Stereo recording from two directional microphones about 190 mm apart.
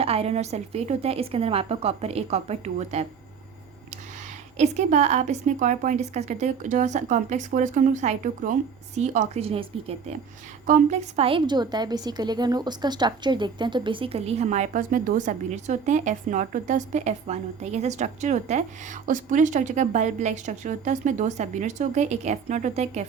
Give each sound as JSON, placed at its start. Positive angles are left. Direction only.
{"t": 0.0, "sound": "a woman's voice", "side_deg": -30}
{"t": 4.5, "sound": "a woman's voice", "side_deg": -35}